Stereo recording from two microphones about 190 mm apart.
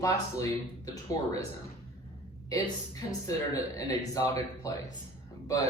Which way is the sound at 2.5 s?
20° left (ahead or behind).